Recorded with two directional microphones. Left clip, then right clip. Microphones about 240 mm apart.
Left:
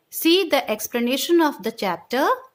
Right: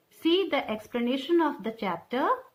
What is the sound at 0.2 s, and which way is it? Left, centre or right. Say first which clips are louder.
A woman's voice: left 7 dB; left.